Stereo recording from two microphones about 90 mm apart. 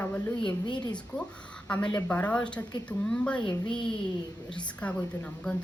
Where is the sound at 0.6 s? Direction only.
55° left (ahead or behind).